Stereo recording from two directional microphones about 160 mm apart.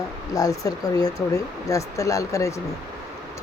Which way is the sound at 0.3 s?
20° left (ahead or behind).